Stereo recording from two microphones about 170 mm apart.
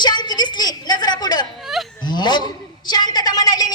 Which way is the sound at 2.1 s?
25° left (ahead or behind).